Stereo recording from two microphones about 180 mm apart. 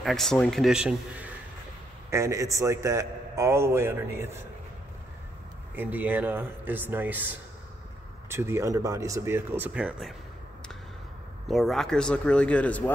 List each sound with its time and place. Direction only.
0.0 s a man's voice: centre (ahead or behind); by 4.5 s 15° right (ahead or behind)
5.8 s a man's voice: 10° right (ahead or behind)
11.4 s speech: centre (ahead or behind)